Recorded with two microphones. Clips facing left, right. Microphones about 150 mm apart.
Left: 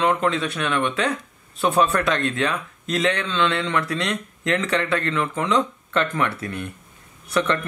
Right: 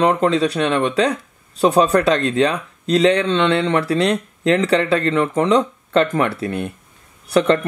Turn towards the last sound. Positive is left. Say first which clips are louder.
# right 7 dB
turn(degrees=-35)  # may be behind; listen again after turning